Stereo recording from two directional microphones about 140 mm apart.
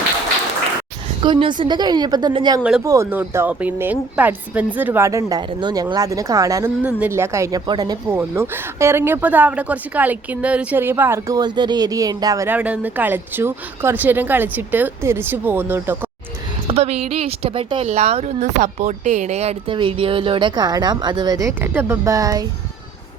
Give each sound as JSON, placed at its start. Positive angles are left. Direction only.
{"t": 1.2, "sound": "a woman's voice", "side_deg": -35}
{"t": 8.1, "sound": "speech", "side_deg": -15}
{"t": 11.3, "sound": "speech", "side_deg": -30}
{"t": 12.5, "sound": "speech", "side_deg": -10}
{"t": 16.6, "sound": "a woman's voice", "side_deg": -50}